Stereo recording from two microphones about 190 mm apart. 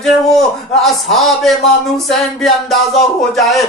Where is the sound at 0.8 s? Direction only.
Centre (ahead or behind).